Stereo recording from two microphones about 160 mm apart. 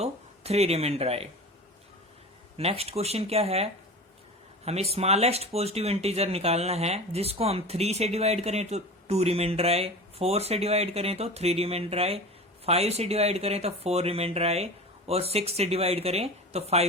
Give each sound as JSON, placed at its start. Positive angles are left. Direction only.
{"t": 0.0, "sound": "speech", "side_deg": -40}
{"t": 2.6, "sound": "speech", "side_deg": -40}